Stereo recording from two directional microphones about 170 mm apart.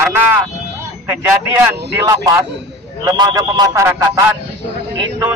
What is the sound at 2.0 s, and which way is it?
A man's voice, 15° right (ahead or behind).